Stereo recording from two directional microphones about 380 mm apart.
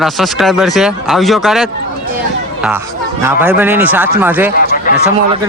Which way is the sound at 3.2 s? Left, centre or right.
Centre.